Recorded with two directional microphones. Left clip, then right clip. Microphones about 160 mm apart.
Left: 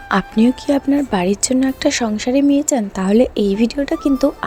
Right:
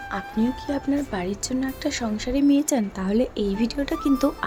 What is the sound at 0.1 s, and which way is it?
Speech, 55° left (ahead or behind).